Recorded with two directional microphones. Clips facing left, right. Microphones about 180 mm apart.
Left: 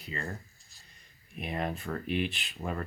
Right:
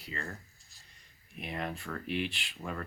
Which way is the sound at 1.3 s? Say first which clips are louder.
Left 4 dB; 20° left (ahead or behind).